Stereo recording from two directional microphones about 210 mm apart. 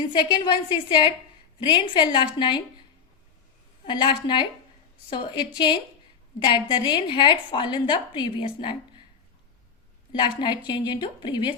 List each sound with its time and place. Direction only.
0.1 s a woman's voice: 20° left (ahead or behind)
3.8 s a woman's voice: 25° left (ahead or behind)
10.1 s a woman's voice: 20° left (ahead or behind)